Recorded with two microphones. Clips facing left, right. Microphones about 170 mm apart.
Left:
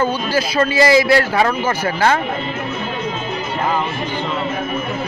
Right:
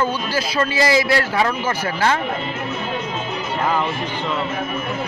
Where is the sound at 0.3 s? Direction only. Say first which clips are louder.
Left 4 dB; 70° left (ahead or behind).